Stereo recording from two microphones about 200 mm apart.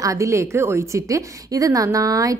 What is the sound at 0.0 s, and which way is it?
A woman's voice, 15° right (ahead or behind).